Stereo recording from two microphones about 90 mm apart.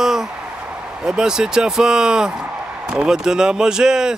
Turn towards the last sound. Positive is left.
turn(degrees=-5)  # may be behind; listen again after turning